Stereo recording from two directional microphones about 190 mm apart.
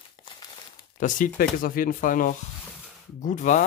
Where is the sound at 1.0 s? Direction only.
45° left (ahead or behind).